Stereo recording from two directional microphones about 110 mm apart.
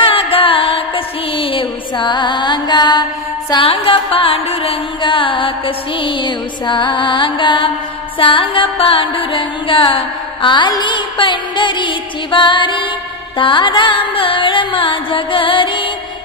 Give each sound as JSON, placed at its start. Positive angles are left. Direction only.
{"t": 0.0, "sound": "music", "side_deg": 55}
{"t": 3.6, "sound": "music", "side_deg": 55}